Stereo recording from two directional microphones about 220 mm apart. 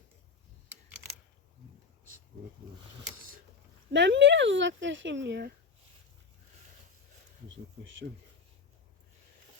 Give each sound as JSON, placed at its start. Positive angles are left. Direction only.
{"t": 3.9, "sound": "speech", "side_deg": -55}
{"t": 7.4, "sound": "speech", "side_deg": -55}